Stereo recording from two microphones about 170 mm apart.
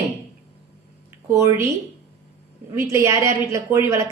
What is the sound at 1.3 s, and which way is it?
Speech, 15° right (ahead or behind).